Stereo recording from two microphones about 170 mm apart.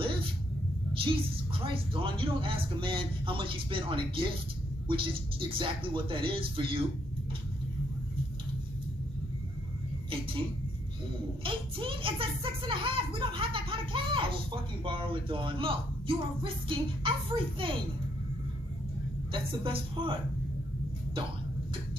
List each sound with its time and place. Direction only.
0.0 s a sound: 30° right (ahead or behind)
0.9 s speech: 30° right (ahead or behind)
11.4 s speech: 30° right (ahead or behind)
19.3 s speech: 30° right (ahead or behind)